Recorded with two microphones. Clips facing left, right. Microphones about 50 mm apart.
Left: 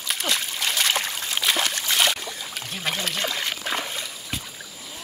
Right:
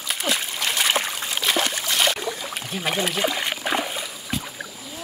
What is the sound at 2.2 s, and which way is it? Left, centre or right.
Boat, centre.